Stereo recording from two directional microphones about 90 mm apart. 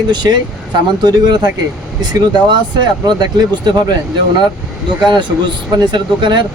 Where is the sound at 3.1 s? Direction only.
50° right (ahead or behind).